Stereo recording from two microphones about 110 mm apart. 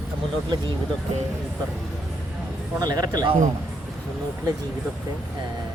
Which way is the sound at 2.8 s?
35° right (ahead or behind).